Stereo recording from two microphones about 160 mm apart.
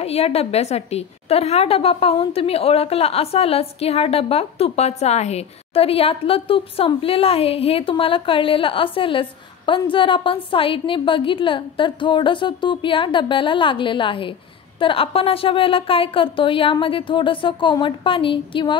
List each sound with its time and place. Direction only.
0.0 s a woman's voice: 40° left (ahead or behind)